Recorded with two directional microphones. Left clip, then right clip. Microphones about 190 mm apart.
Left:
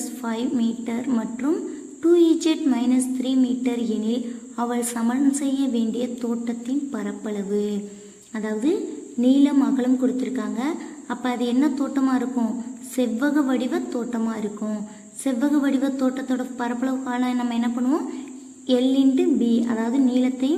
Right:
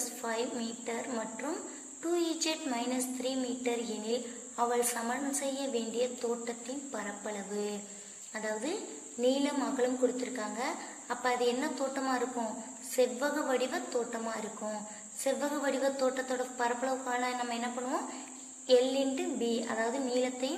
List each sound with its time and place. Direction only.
0.2 s a woman's voice: 30° left (ahead or behind)